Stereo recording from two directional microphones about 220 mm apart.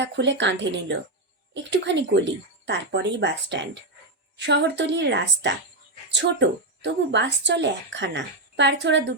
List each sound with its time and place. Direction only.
0.0 s speech: 55° right (ahead or behind)